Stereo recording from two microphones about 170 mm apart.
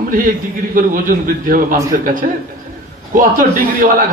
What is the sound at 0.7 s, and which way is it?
A man's voice, 55° right (ahead or behind).